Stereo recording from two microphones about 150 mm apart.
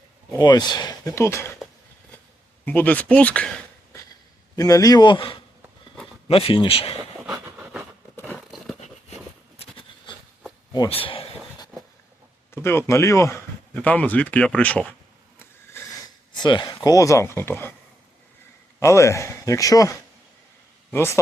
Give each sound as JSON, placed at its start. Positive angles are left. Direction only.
{"t": 0.3, "sound": "speech", "side_deg": 25}
{"t": 2.6, "sound": "speech", "side_deg": 10}
{"t": 4.5, "sound": "speech", "side_deg": 25}
{"t": 8.4, "sound": "a sound", "side_deg": 0}
{"t": 9.6, "sound": "a sound", "side_deg": 35}
{"t": 12.5, "sound": "speech", "side_deg": 15}
{"t": 15.4, "sound": "a sound", "side_deg": 15}
{"t": 16.3, "sound": "speech", "side_deg": 30}
{"t": 18.8, "sound": "speech", "side_deg": 20}